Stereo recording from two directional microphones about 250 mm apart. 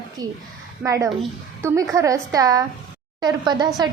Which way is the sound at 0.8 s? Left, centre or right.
Centre.